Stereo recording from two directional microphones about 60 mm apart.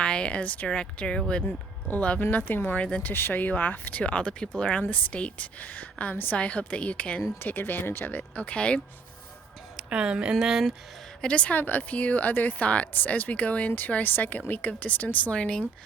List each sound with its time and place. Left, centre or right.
0.0 s speech: centre
2.4 s speech: left
3.1 s speech: left
7.3 s speech: left; by 8.8 s centre
9.7 s speech: centre
10.3 s speech: centre
11.2 s speech: centre